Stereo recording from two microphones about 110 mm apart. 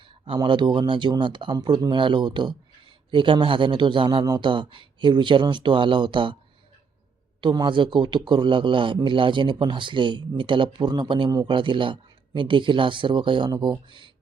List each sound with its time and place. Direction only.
0.4 s speech: 45° right (ahead or behind)
7.4 s speech: 45° right (ahead or behind)